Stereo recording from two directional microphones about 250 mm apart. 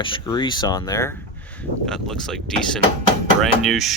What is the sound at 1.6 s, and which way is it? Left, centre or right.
Speech, centre.